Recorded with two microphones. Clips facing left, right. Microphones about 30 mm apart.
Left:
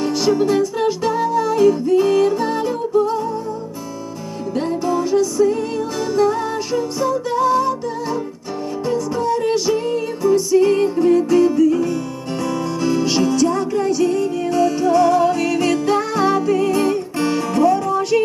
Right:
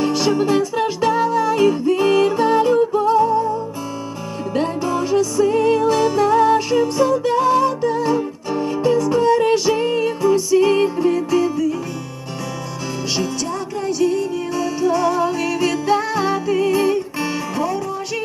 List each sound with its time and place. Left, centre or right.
0.0 s music: centre
2.9 s music: right
4.9 s music: centre
9.2 s music: right
10.5 s music: centre
11.3 s music: centre
12.8 s music: centre